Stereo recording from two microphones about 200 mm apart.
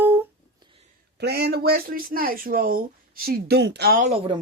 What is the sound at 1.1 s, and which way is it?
Speech, 50° right (ahead or behind).